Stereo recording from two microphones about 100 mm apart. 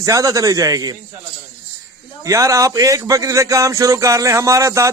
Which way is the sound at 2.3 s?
30° right (ahead or behind).